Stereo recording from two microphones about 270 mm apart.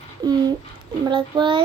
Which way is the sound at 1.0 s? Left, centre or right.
Centre.